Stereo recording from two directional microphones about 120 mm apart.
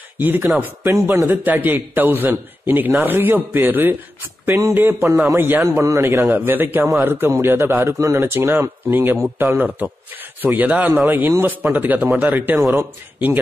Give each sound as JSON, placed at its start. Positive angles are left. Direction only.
{"t": 0.2, "sound": "a man's voice", "side_deg": -15}